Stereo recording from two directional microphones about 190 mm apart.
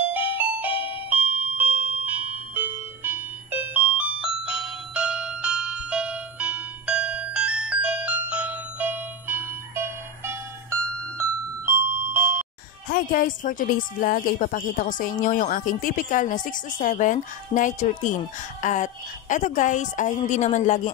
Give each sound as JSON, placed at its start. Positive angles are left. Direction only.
{"t": 0.1, "sound": "music", "side_deg": -10}
{"t": 12.9, "sound": "a woman's voice", "side_deg": 45}